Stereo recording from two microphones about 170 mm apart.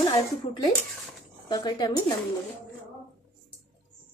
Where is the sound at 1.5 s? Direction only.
25° left (ahead or behind).